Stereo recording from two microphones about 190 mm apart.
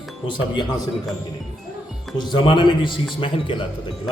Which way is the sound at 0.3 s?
25° left (ahead or behind).